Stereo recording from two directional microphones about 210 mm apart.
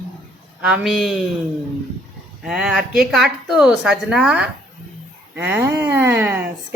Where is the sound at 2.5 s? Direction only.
5° right (ahead or behind).